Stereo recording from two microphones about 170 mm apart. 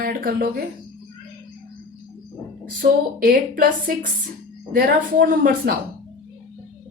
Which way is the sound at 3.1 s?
55° right (ahead or behind).